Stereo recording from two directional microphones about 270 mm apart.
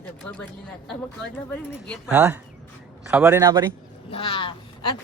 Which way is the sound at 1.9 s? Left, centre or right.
Centre.